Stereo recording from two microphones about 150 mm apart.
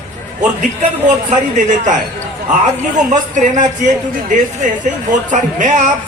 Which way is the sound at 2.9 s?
55° right (ahead or behind).